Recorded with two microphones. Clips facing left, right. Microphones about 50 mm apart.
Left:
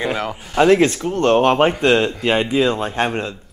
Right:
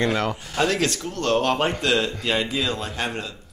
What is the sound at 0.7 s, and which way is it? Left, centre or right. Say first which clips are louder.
Speech: left 10 dB; left.